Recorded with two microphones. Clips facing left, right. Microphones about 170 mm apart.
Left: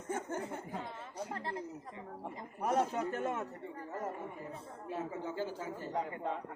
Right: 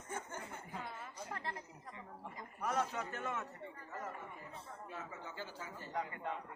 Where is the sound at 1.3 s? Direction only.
25° left (ahead or behind).